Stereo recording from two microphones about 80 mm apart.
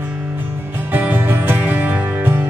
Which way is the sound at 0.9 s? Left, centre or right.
Right.